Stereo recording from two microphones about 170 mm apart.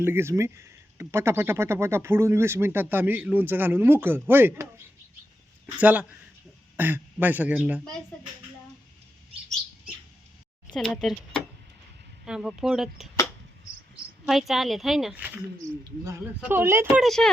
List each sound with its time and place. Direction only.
0.0 s speech: 15° right (ahead or behind)
10.7 s speech: centre (ahead or behind)
14.3 s speech: centre (ahead or behind)
16.4 s speech: 10° right (ahead or behind)
16.9 s speech: centre (ahead or behind)